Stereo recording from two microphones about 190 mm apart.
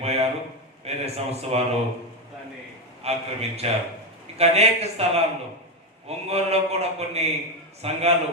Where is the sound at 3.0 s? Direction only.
35° right (ahead or behind).